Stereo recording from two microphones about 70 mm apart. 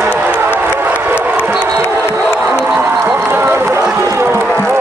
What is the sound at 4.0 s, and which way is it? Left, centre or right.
Music, right.